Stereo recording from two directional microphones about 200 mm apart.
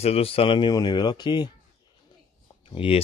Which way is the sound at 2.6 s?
25° left (ahead or behind).